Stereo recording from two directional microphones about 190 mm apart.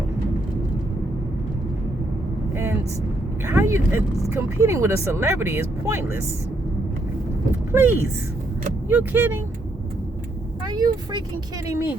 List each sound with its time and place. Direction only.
3.4 s speech: 15° right (ahead or behind)
7.7 s speech: 10° right (ahead or behind)
10.7 s vehicle: 20° right (ahead or behind)
11.7 s speech: 15° right (ahead or behind)